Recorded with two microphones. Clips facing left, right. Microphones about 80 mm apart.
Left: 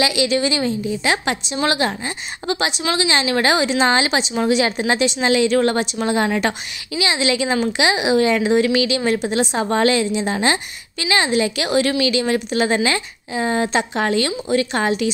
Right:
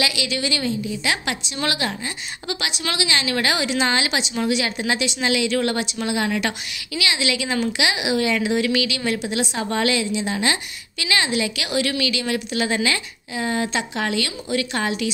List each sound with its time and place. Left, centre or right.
0.0 s speech: left
3.0 s speech: left